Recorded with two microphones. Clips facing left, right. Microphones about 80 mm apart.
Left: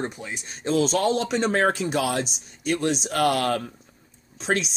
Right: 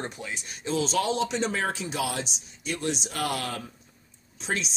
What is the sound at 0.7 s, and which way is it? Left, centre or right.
Speech, left.